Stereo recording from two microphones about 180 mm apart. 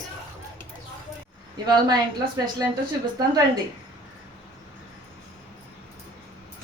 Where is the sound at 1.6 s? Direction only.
25° right (ahead or behind).